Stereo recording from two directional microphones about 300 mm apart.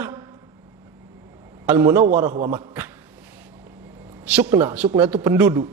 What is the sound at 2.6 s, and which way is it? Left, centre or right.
Speech, centre.